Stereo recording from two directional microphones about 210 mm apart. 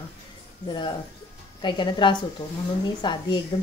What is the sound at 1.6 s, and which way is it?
Speech, 20° left (ahead or behind).